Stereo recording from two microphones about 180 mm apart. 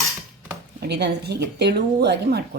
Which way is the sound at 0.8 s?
65° right (ahead or behind).